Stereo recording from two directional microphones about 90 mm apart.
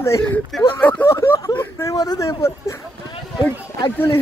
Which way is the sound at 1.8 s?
40° left (ahead or behind).